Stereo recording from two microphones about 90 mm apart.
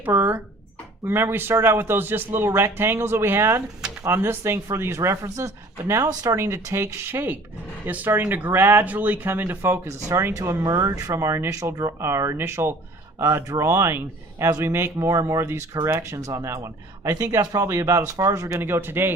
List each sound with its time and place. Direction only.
0.0 s speech: 20° right (ahead or behind)